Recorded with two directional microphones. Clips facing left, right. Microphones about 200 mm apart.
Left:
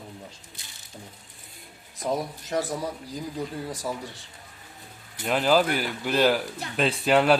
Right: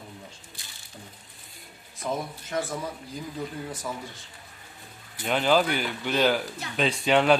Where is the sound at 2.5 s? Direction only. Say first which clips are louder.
Left 2 dB; 40° left (ahead or behind).